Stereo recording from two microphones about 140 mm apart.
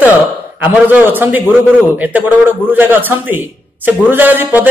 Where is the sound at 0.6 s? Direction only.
15° right (ahead or behind).